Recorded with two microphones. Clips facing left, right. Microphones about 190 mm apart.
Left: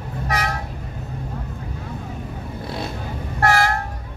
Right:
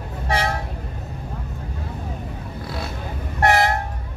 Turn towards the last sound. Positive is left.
turn(degrees=-20)  # may be behind; listen again after turning